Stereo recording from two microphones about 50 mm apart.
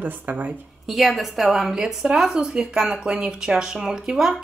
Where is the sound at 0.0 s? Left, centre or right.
Right.